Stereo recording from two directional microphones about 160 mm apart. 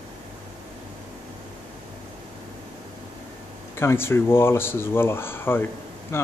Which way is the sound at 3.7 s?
15° left (ahead or behind).